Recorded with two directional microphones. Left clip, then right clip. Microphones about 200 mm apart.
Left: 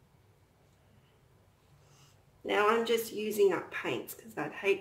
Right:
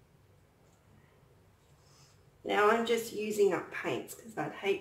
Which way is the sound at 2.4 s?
40° left (ahead or behind).